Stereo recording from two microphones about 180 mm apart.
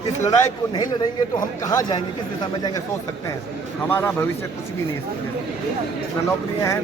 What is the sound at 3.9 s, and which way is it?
Speech, 15° left (ahead or behind).